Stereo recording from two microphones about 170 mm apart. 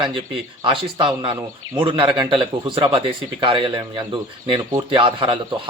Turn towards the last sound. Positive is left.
turn(degrees=-30)  # may be behind; listen again after turning